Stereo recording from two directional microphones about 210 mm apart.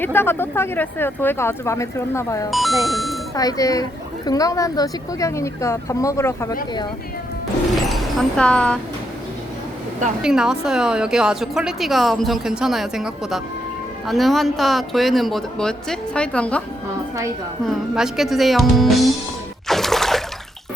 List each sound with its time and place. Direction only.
0.0 s speech: 10° left (ahead or behind)
2.5 s a woman's voice: centre (ahead or behind)
3.3 s speech: 15° left (ahead or behind)
7.7 s a sound: centre (ahead or behind)
10.2 s a woman's voice: 5° right (ahead or behind)
17.7 s a woman's voice: centre (ahead or behind)
19.6 s music: centre (ahead or behind)